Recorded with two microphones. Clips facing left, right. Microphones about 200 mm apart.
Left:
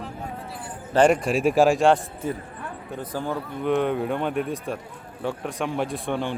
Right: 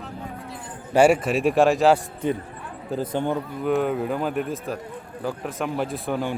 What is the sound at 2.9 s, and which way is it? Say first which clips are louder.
Speech: right 5 dB; 25° right (ahead or behind).